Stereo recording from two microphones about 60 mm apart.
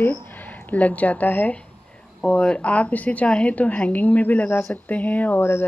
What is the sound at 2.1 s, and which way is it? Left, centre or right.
Speech, centre.